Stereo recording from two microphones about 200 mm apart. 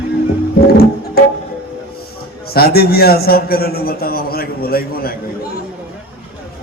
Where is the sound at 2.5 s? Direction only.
50° left (ahead or behind).